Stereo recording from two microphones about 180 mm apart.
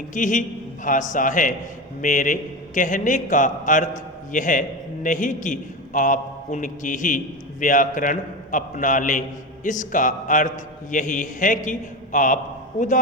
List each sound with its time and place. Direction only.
0.1 s a man's voice: 45° left (ahead or behind)